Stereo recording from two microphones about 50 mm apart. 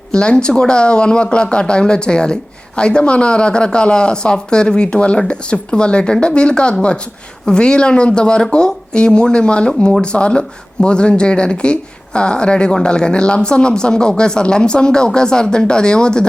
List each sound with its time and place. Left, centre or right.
0.1 s speech: centre